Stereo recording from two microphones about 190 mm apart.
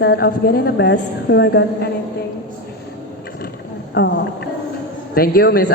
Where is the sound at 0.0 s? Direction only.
60° left (ahead or behind).